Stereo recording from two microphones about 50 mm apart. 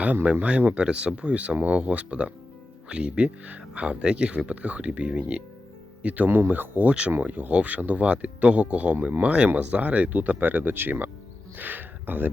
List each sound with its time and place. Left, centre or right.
0.3 s speech: right